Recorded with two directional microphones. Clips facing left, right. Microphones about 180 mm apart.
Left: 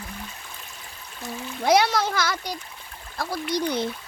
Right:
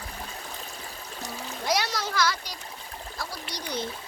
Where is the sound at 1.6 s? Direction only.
55° left (ahead or behind).